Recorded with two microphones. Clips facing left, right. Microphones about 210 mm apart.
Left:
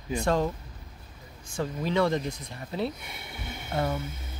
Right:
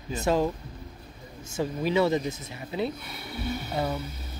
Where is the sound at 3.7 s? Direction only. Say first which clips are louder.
Left 2 dB; 10° right (ahead or behind).